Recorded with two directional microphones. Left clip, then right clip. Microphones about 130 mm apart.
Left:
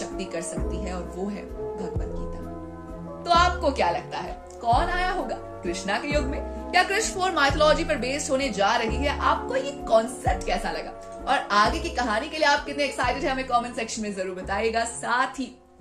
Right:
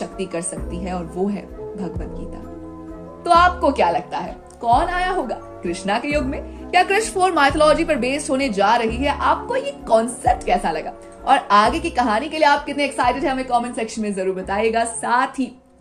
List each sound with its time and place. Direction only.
0.0 s speech: 50° right (ahead or behind)
3.2 s speech: 45° right (ahead or behind)